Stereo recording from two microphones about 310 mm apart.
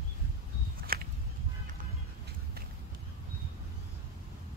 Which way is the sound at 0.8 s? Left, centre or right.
Right.